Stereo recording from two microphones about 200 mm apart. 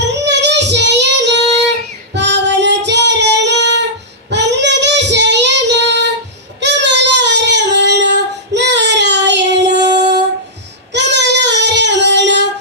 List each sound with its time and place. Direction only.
0.3 s child singing: 60° right (ahead or behind)
9.8 s a sound: 20° right (ahead or behind)
10.9 s child singing: 60° right (ahead or behind)